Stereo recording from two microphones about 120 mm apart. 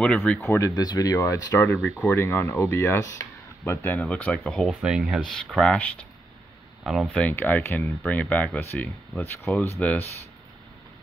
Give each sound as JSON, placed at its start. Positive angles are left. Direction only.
{"t": 0.0, "sound": "speech", "side_deg": 10}
{"t": 0.4, "sound": "speech", "side_deg": 25}
{"t": 1.2, "sound": "speech", "side_deg": 15}
{"t": 6.8, "sound": "speech", "side_deg": 0}
{"t": 7.2, "sound": "speech", "side_deg": 15}